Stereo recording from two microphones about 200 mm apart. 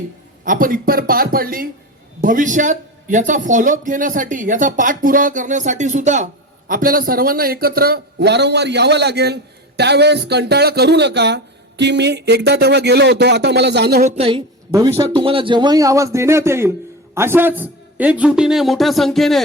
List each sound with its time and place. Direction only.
0.4 s a man's voice: 45° right (ahead or behind)
14.0 s a woman's voice: 25° right (ahead or behind)
14.7 s a man's voice: 15° right (ahead or behind); by 19.4 s centre (ahead or behind)